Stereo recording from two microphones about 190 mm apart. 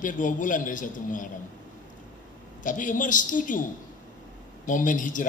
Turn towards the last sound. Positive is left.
turn(degrees=45)  # may be behind; listen again after turning